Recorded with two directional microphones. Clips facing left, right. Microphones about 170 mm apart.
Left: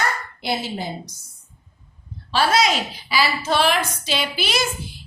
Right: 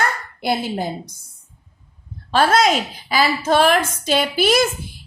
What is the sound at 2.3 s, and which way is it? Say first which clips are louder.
A woman's voice: right 3 dB; 50° right (ahead or behind).